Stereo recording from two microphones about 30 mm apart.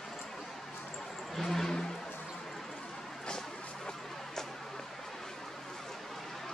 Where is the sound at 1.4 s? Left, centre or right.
Centre.